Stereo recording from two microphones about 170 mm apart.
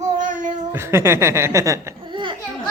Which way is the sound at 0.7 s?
15° right (ahead or behind).